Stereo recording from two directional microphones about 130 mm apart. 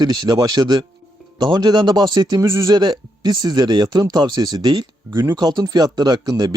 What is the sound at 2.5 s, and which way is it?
Speech, 20° right (ahead or behind).